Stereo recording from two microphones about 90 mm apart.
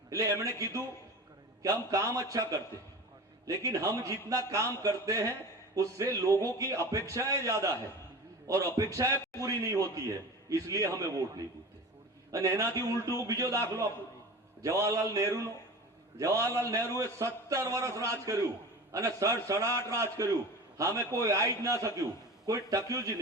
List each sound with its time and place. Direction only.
0.1 s a man's voice: 35° right (ahead or behind)
12.3 s a man's voice: 35° right (ahead or behind)